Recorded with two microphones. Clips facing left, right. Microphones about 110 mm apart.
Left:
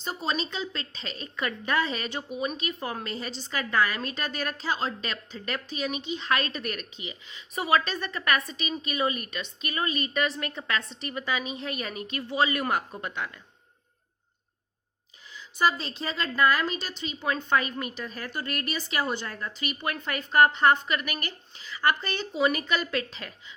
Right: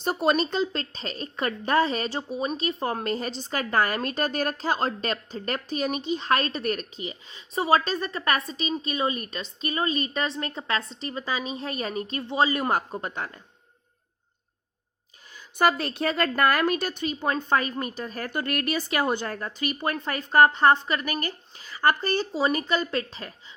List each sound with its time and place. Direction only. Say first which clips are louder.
0.0 s speech: right 7 dB; 60° right (ahead or behind)
0.4 s a woman's voice: right 7 dB; 40° right (ahead or behind)
15.3 s a woman's voice: right 3 dB; 50° right (ahead or behind); by 23.6 s 35° right (ahead or behind)